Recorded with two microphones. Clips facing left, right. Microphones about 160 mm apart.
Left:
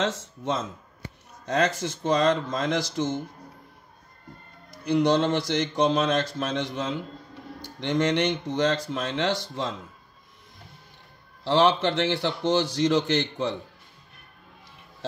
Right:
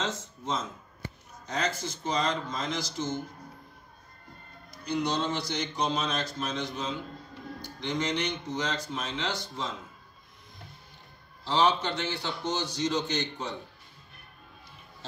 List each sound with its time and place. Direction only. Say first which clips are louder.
1.4 s a man's voice: left 7 dB; 75° left (ahead or behind)
4.8 s a man's voice: left 8 dB; 60° left (ahead or behind); by 6.9 s 80° left
7.8 s a man's voice: left 7 dB; 70° left (ahead or behind)
11.5 s a man's voice: left 5 dB; 90° left